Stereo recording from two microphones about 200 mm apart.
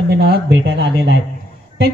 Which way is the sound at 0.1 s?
55° right (ahead or behind).